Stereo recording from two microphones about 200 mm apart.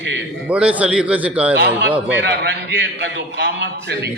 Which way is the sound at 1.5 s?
55° right (ahead or behind).